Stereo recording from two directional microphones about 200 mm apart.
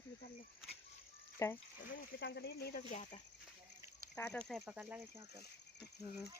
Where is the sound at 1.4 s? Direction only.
15° left (ahead or behind).